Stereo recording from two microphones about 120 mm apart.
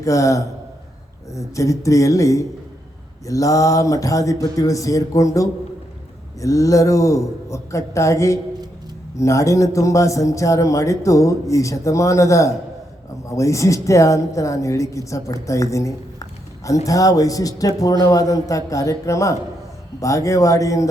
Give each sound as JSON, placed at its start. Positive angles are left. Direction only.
{"t": 0.0, "sound": "a man's voice", "side_deg": 25}